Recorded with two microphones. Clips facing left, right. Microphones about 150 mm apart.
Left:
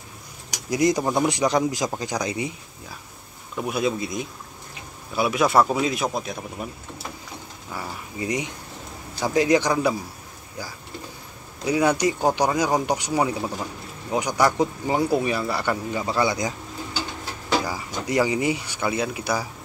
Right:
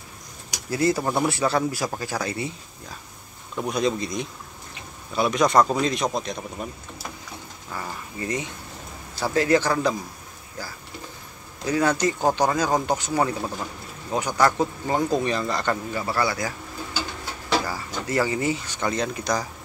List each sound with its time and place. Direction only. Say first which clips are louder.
0.7 s speech: left 2 dB; 15° left (ahead or behind)
3.5 s speech: even; 5° left (ahead or behind)
7.7 s speech: even; 10° left (ahead or behind)
11.6 s speech: left 1 dB; 10° left (ahead or behind)